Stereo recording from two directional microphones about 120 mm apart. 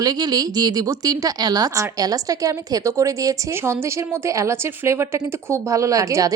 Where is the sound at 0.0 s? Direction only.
35° right (ahead or behind).